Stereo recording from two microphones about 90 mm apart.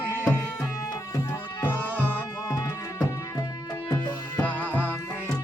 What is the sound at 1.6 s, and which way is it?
Music, 20° left (ahead or behind).